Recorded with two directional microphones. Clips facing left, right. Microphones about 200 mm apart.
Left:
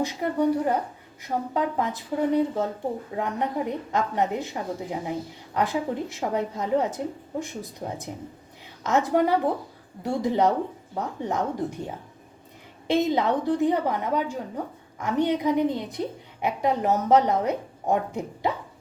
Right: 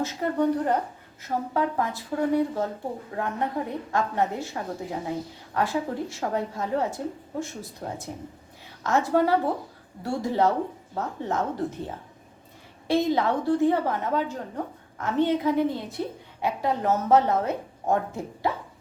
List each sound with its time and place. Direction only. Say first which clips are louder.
0.0 s a woman's voice: left 1 dB; 10° left (ahead or behind)
12.9 s a woman's voice: left 1 dB; 20° left (ahead or behind)